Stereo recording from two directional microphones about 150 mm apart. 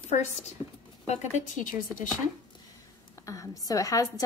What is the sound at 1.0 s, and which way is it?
Speech, 50° left (ahead or behind).